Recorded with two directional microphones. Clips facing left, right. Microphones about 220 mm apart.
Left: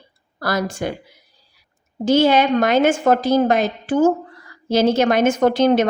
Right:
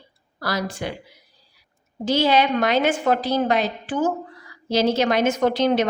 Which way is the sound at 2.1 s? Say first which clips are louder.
Left 4 dB; 50° left (ahead or behind).